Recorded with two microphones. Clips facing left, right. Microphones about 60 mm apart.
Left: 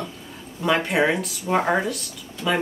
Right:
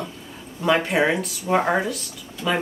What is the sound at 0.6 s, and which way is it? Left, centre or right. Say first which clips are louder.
Speech: right 1 dB; centre.